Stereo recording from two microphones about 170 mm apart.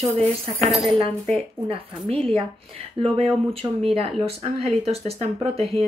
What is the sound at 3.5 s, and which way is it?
Speech, 35° right (ahead or behind).